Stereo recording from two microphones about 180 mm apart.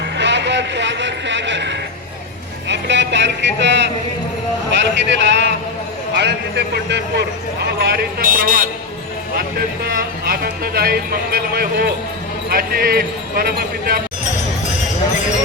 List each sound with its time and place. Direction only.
0.2 s a sound: 75° right (ahead or behind)
4.7 s a man's voice: 80° right
6.1 s a man's voice: 70° right (ahead or behind); by 8.6 s 50° right (ahead or behind)
10.2 s speech: 55° right (ahead or behind)